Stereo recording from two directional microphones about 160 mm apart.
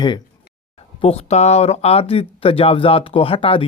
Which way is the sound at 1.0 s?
40° left (ahead or behind).